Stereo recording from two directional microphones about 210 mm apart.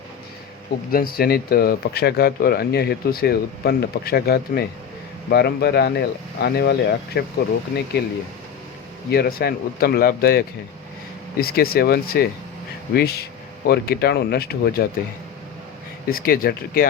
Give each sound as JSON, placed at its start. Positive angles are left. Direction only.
{"t": 0.9, "sound": "speech", "side_deg": 45}
{"t": 9.0, "sound": "speech", "side_deg": 50}
{"t": 16.0, "sound": "speech", "side_deg": 45}